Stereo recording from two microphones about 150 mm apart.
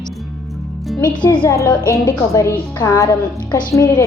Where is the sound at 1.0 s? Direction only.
30° left (ahead or behind).